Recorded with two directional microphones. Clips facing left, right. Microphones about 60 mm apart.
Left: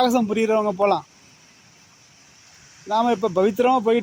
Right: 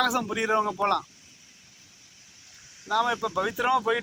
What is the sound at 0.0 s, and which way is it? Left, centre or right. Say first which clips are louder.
Speech: left 7 dB; centre.